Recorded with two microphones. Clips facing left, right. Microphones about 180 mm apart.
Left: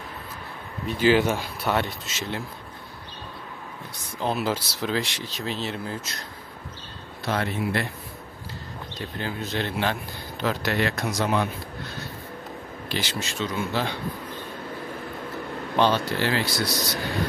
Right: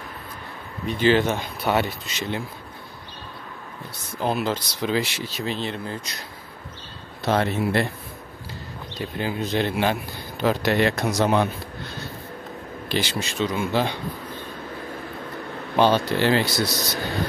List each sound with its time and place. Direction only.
0.8 s speech: 10° left (ahead or behind)
4.2 s speech: centre (ahead or behind)
7.2 s speech: 30° right (ahead or behind)
9.2 s a man's voice: 15° right (ahead or behind)
12.8 s a man's voice: 20° right (ahead or behind)
15.7 s speech: 20° right (ahead or behind)